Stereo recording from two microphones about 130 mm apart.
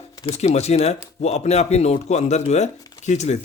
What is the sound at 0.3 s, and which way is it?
Speech, 55° left (ahead or behind).